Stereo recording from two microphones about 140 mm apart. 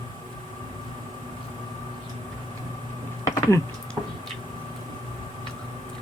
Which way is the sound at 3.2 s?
20° left (ahead or behind).